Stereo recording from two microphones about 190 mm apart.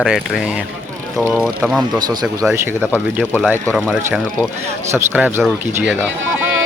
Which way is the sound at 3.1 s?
10° right (ahead or behind).